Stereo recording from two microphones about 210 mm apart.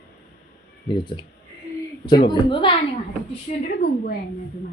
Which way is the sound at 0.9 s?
20° left (ahead or behind).